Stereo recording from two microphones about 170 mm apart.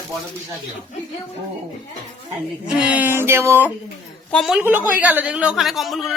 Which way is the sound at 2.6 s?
5° right (ahead or behind).